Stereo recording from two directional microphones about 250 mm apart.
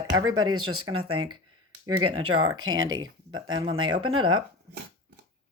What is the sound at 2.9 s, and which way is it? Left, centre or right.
Speech, centre.